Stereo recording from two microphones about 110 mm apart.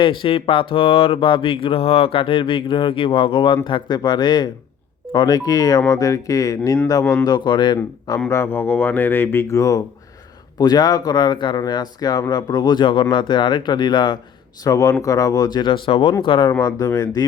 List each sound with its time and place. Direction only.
0.0 s speech: 50° left (ahead or behind)
8.3 s speech: 20° left (ahead or behind); by 16.5 s 50° left (ahead or behind)
16.5 s speech: 35° left (ahead or behind)